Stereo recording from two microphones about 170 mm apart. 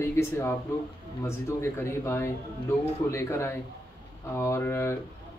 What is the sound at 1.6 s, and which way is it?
A man's voice, 15° left (ahead or behind).